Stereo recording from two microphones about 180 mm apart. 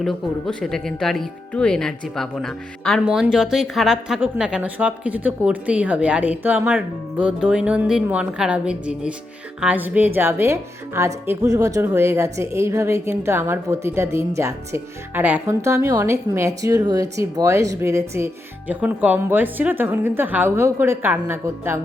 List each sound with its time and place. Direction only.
0.0 s a woman's voice: centre (ahead or behind)